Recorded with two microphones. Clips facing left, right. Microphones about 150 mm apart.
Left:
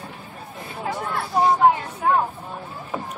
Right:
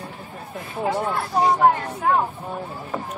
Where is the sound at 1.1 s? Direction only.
Centre (ahead or behind).